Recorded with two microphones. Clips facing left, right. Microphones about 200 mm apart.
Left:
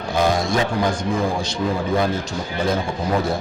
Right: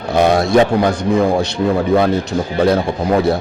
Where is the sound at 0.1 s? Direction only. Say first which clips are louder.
Right 7 dB; 65° right (ahead or behind).